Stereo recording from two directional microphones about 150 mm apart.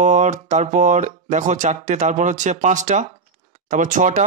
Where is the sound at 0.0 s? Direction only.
55° right (ahead or behind).